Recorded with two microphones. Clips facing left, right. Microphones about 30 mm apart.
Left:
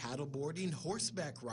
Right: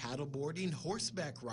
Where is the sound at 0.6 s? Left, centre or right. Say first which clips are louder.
Right 1 dB; centre.